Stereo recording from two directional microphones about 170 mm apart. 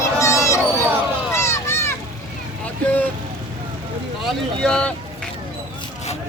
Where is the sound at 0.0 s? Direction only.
20° left (ahead or behind).